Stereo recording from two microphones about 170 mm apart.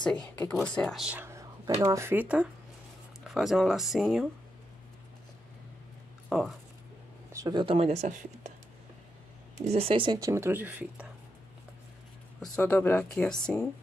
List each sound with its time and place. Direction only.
0.0 s speech: 5° left (ahead or behind)
6.2 s speech: centre (ahead or behind)
7.3 s speech: 25° right (ahead or behind); by 8.5 s 40° right (ahead or behind)
9.6 s speech: 35° right (ahead or behind); by 11.1 s 10° right (ahead or behind)
12.4 s speech: 10° left (ahead or behind)